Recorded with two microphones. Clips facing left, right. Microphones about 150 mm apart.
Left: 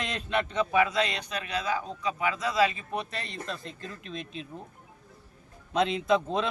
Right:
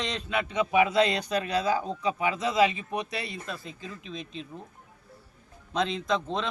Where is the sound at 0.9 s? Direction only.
30° right (ahead or behind); by 4.7 s centre (ahead or behind).